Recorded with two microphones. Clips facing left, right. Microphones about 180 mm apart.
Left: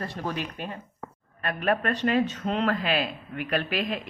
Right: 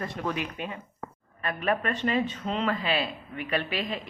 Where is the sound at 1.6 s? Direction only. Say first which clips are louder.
Left 2 dB; 50° left (ahead or behind).